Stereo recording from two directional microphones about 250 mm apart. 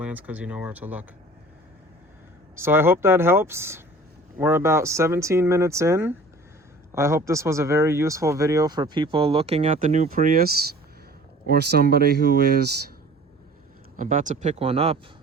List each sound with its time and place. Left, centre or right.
0.0 s speech: centre
2.6 s speech: centre; by 12.7 s right
13.9 s speech: right